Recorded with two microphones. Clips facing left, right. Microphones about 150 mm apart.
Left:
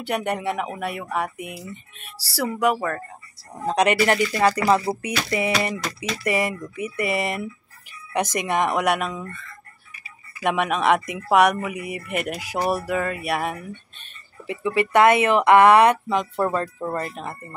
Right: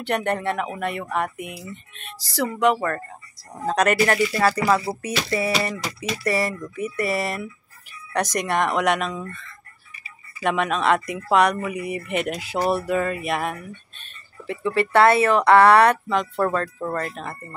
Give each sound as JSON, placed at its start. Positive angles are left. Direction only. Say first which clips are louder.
{"t": 0.0, "sound": "speech", "louder": "right 1 dB", "side_deg": 10}
{"t": 3.6, "sound": "speech", "louder": "even", "side_deg": 15}
{"t": 10.4, "sound": "speech", "louder": "even", "side_deg": 15}